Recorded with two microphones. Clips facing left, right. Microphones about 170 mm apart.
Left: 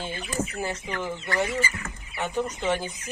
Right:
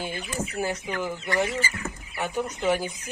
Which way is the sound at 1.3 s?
20° right (ahead or behind).